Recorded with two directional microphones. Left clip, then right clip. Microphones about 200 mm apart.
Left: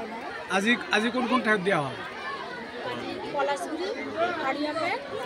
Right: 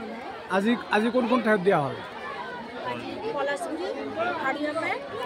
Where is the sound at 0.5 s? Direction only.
35° right (ahead or behind).